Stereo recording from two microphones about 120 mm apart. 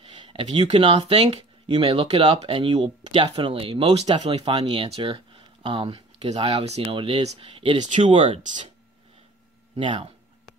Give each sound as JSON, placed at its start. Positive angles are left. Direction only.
{"t": 0.1, "sound": "a sound", "side_deg": -45}
{"t": 0.8, "sound": "speech", "side_deg": -60}
{"t": 4.8, "sound": "speech", "side_deg": -55}
{"t": 6.4, "sound": "speech", "side_deg": -60}
{"t": 7.0, "sound": "speech", "side_deg": -45}
{"t": 9.8, "sound": "speech", "side_deg": -45}